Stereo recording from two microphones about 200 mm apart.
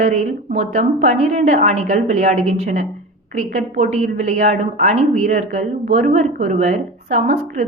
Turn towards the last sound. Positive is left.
turn(degrees=-35)  # may be behind; listen again after turning